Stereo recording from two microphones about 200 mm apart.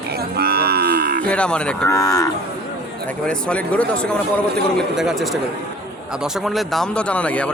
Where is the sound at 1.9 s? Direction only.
15° left (ahead or behind).